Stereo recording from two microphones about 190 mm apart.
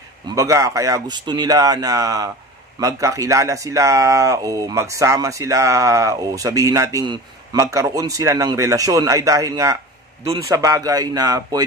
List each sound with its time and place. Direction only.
0.3 s speech: 15° right (ahead or behind)